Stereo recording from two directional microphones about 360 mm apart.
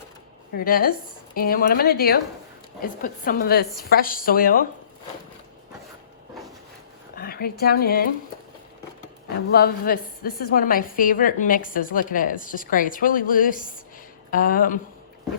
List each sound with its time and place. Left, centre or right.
0.5 s a woman's voice: left
7.2 s speech: left
9.5 s a woman's voice: left